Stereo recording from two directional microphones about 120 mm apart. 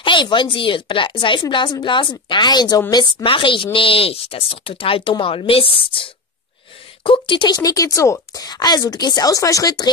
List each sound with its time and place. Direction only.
0.0 s a woman's voice: 40° left (ahead or behind)